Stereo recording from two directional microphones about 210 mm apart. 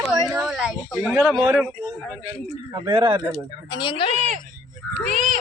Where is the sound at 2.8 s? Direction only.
20° right (ahead or behind).